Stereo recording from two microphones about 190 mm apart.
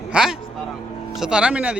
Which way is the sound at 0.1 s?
5° right (ahead or behind).